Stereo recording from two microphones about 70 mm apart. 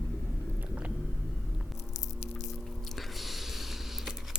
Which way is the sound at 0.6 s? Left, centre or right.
Right.